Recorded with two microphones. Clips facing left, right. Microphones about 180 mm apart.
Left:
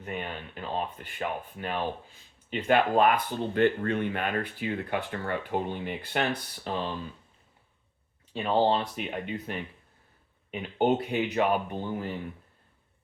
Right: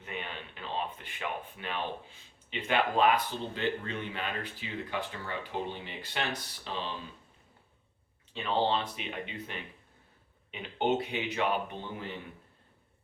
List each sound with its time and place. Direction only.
0.0 s speech: 45° left (ahead or behind)
8.3 s speech: 40° left (ahead or behind)